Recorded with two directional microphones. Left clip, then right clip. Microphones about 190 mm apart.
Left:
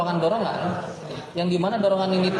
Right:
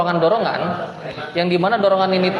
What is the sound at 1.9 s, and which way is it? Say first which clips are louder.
Speech: right 6 dB; 15° left (ahead or behind).